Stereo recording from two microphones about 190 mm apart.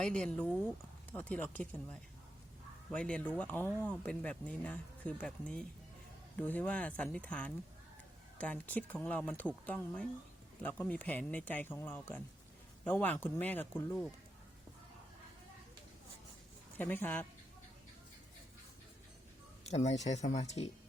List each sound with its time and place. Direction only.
0.0 s speech: 5° left (ahead or behind)
16.7 s speech: 10° left (ahead or behind)
19.6 s speech: 35° left (ahead or behind)